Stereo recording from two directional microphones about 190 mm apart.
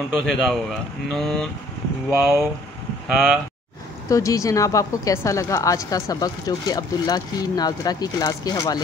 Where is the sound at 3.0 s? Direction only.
Centre (ahead or behind).